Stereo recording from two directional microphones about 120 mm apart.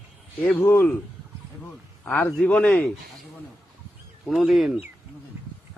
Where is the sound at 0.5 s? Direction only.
15° left (ahead or behind).